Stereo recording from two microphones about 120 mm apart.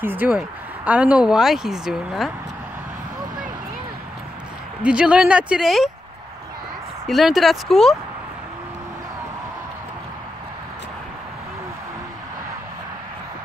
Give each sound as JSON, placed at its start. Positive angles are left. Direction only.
{"t": 0.0, "sound": "speech", "side_deg": -15}
{"t": 4.8, "sound": "speech", "side_deg": -10}
{"t": 7.1, "sound": "speech", "side_deg": 0}